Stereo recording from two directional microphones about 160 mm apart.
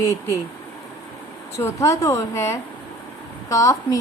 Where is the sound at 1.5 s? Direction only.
20° left (ahead or behind).